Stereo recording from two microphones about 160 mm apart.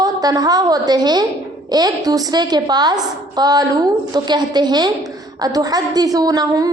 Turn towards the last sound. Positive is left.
turn(degrees=-20)  # may be behind; listen again after turning